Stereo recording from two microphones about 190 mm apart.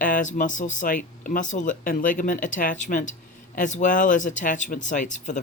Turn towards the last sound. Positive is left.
turn(degrees=40)  # may be behind; listen again after turning